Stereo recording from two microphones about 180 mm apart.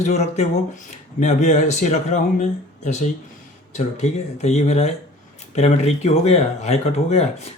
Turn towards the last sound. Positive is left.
turn(degrees=35)  # may be behind; listen again after turning